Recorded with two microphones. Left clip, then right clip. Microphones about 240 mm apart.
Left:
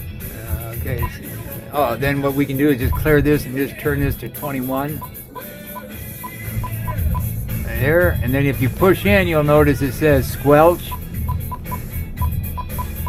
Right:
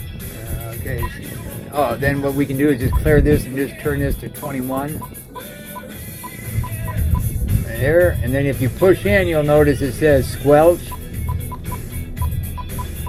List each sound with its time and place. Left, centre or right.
1.7 s speech: centre
7.8 s speech: left